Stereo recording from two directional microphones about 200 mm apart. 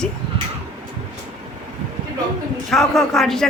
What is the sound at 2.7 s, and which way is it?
Speech, centre (ahead or behind).